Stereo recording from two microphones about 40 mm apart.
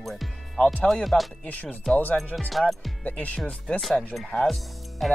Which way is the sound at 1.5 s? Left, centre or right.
Left.